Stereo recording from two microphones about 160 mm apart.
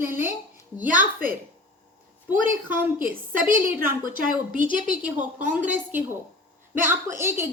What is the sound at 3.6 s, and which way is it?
A woman's voice, 60° right (ahead or behind).